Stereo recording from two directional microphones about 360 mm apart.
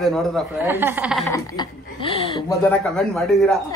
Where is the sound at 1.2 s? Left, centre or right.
Centre.